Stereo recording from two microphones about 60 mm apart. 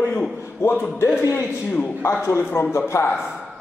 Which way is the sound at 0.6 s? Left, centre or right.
Left.